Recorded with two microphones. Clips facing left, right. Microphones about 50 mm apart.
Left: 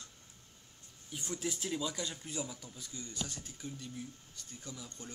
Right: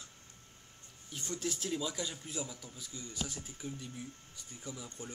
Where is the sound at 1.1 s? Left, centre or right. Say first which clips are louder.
Even; centre.